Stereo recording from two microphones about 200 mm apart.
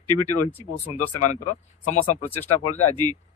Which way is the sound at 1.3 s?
35° left (ahead or behind).